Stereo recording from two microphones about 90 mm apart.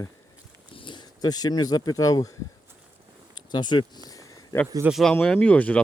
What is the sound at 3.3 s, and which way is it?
Speech, 55° left (ahead or behind).